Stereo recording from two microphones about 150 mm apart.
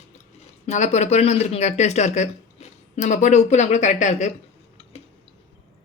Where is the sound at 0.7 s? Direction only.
50° left (ahead or behind).